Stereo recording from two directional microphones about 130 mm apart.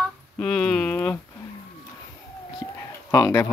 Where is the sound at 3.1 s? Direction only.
25° left (ahead or behind).